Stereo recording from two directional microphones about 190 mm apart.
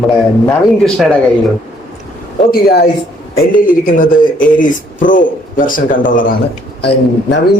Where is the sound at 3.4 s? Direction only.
45° left (ahead or behind).